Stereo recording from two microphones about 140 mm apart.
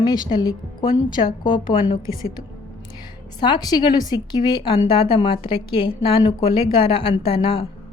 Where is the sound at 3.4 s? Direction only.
30° left (ahead or behind).